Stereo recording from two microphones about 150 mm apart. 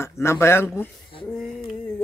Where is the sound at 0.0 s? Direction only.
15° left (ahead or behind).